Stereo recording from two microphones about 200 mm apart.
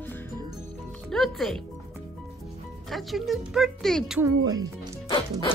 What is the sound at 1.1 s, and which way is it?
Speech, centre (ahead or behind).